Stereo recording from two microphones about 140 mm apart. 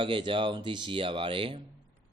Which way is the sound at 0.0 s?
35° right (ahead or behind).